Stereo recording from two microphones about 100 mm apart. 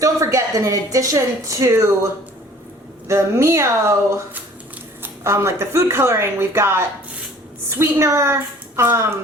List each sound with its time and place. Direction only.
0.0 s speech: 30° right (ahead or behind)
3.1 s speech: 30° right (ahead or behind)
5.0 s speech: 25° right (ahead or behind)